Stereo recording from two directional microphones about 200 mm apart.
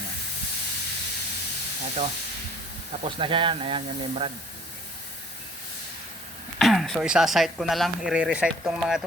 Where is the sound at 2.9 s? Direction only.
25° right (ahead or behind).